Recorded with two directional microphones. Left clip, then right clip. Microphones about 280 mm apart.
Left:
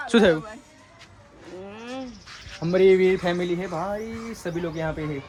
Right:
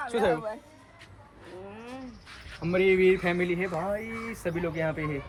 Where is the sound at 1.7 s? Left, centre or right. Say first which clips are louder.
Left 9 dB; left.